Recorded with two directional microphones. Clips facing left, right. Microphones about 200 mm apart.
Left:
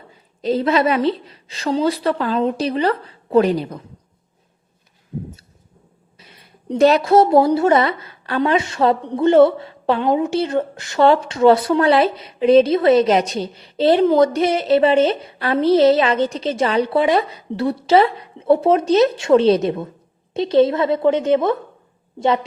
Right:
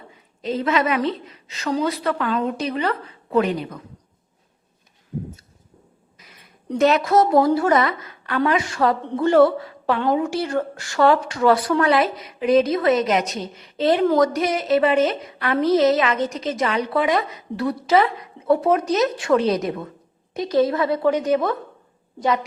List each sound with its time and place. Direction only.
0.4 s a woman's voice: 35° left (ahead or behind)
6.1 s speech: 30° left (ahead or behind)